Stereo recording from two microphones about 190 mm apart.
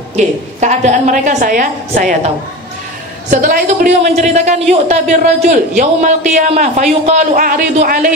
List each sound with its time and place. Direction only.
0.1 s a woman's voice: 40° right (ahead or behind)